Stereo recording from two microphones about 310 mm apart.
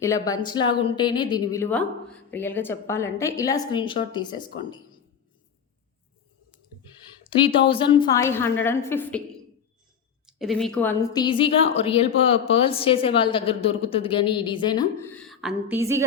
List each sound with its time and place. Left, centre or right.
0.0 s a woman's voice: centre
7.4 s a woman's voice: centre
10.2 s a woman's voice: centre